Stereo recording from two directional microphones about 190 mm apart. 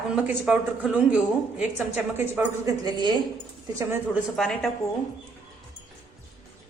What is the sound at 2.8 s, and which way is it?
Speech, 25° right (ahead or behind).